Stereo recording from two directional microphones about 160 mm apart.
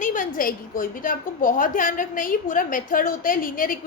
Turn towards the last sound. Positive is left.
turn(degrees=60)  # may be behind; listen again after turning